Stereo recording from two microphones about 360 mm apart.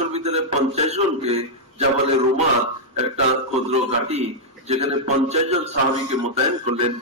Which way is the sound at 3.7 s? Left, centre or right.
Centre.